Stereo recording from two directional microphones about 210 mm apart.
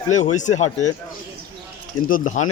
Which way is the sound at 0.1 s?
35° left (ahead or behind).